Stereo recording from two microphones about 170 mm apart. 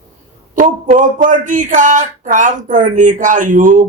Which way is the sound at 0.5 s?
50° right (ahead or behind).